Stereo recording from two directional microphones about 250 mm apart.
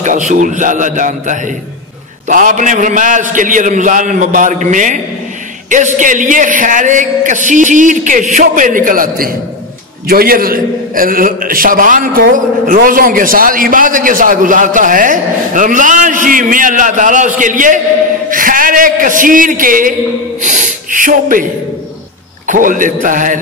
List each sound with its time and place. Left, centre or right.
0.0 s a man's voice: right
5.9 s a man's voice: right
22.5 s a man's voice: right